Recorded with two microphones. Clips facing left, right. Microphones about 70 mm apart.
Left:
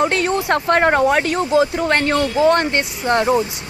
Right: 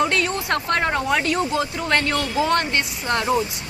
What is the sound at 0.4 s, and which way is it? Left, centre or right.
Speech, left.